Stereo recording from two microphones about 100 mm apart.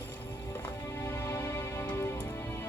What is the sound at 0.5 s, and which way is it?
Music, 25° left (ahead or behind).